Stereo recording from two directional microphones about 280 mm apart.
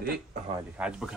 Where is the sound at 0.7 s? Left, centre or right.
Centre.